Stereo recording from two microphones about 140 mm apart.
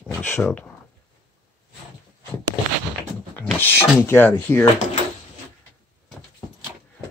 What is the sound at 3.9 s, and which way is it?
Speech, 15° left (ahead or behind).